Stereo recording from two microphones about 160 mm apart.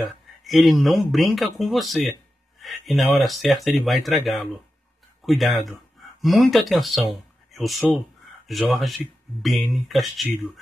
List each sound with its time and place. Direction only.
0.4 s speech: centre (ahead or behind)
7.1 s a sound: centre (ahead or behind)
8.5 s speech: centre (ahead or behind)